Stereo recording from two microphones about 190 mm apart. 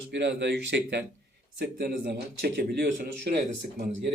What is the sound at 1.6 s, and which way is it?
Speech, 55° right (ahead or behind).